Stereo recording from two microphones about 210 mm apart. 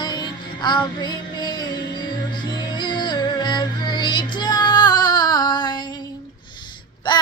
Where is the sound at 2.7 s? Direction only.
20° left (ahead or behind).